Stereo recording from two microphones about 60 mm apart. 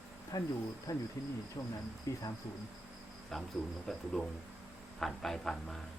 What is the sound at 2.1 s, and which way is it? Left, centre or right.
Cricket, left.